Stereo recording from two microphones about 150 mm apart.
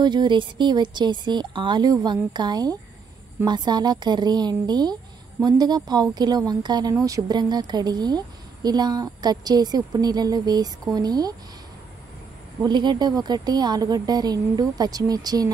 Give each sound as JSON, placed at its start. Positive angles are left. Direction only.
{"t": 0.0, "sound": "a woman's voice", "side_deg": -30}
{"t": 12.6, "sound": "a woman's voice", "side_deg": -30}